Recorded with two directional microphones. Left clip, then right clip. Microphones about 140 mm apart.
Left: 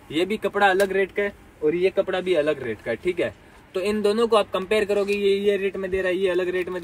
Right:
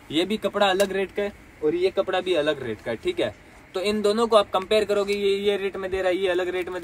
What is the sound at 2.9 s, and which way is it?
A man's voice, 35° right (ahead or behind).